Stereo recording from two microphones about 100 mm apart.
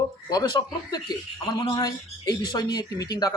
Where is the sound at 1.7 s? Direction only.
40° left (ahead or behind).